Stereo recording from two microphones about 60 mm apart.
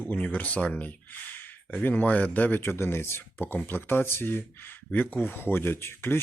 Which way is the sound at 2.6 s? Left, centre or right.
Left.